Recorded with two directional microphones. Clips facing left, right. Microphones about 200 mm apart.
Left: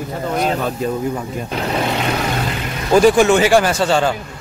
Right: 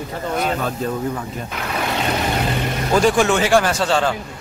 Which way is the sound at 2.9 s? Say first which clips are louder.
Left 5 dB; 5° left (ahead or behind).